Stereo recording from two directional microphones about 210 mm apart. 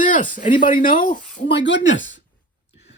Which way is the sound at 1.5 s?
55° left (ahead or behind).